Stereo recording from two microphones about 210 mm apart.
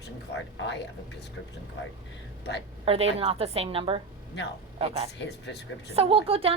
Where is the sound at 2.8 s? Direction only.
25° right (ahead or behind).